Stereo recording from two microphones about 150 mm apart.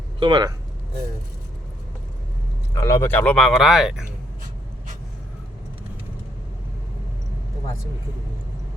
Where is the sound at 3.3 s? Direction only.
Centre (ahead or behind).